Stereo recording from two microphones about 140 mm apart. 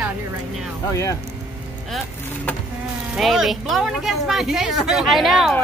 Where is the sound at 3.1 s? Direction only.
Centre (ahead or behind).